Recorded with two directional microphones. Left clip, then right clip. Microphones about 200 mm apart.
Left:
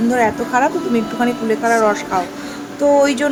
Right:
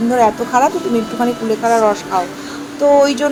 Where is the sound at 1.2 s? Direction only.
Centre (ahead or behind).